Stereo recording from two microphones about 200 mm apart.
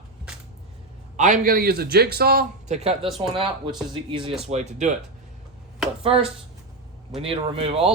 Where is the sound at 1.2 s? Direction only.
40° right (ahead or behind).